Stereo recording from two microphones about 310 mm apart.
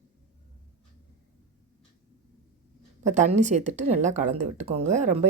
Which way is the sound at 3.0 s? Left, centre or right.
Right.